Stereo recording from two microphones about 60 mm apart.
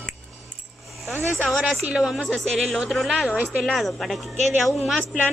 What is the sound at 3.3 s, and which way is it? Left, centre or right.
Speech, centre.